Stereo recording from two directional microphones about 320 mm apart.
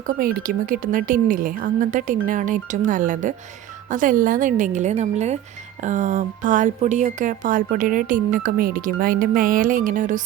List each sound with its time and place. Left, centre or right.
0.1 s speech: right